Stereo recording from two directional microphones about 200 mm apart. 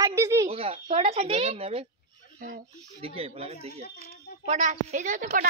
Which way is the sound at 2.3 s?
45° right (ahead or behind).